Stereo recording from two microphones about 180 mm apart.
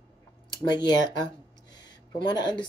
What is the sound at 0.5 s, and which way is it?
Speech, 25° left (ahead or behind).